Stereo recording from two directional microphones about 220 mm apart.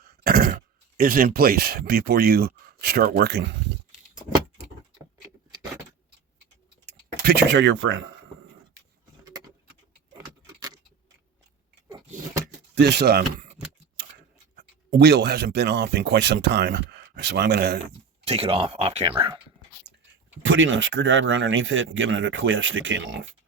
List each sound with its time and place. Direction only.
0.3 s speech: 45° right (ahead or behind)
7.3 s speech: 50° right (ahead or behind)
11.9 s a sound: 20° right (ahead or behind)
12.8 s speech: 45° right (ahead or behind)
14.5 s speech: 45° right (ahead or behind)
18.3 s speech: 25° right (ahead or behind)
20.4 s speech: 60° right (ahead or behind)